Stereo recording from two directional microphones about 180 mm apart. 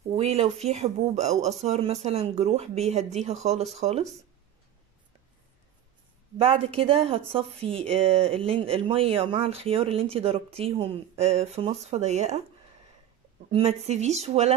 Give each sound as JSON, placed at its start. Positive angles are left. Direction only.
{"t": 0.1, "sound": "speech", "side_deg": -35}
{"t": 6.3, "sound": "speech", "side_deg": -30}
{"t": 13.5, "sound": "speech", "side_deg": -35}